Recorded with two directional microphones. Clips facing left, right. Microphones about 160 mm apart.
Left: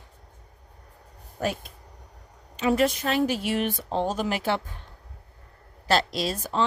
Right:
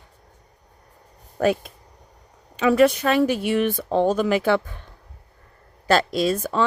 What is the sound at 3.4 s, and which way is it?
Speech, 55° right (ahead or behind).